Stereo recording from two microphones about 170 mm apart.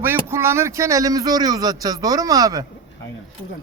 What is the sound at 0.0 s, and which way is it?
A man's voice, 15° right (ahead or behind).